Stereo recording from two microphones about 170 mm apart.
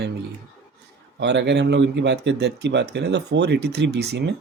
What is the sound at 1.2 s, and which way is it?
Speech, 90° right.